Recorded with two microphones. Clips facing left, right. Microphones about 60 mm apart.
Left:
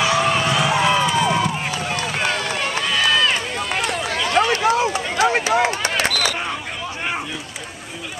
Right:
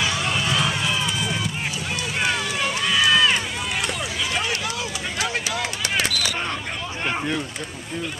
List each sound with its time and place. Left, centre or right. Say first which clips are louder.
0.5 s run: left 4 dB; centre
0.7 s run: left 8 dB; left
2.1 s run: right 1 dB; centre
4.1 s run: left 7 dB; left
4.6 s a sound: left 10 dB; left